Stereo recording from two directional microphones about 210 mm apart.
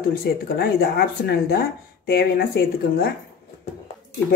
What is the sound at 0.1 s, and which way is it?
Speech, 45° left (ahead or behind).